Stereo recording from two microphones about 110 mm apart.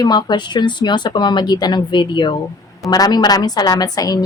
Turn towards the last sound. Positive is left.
turn(degrees=35)  # may be behind; listen again after turning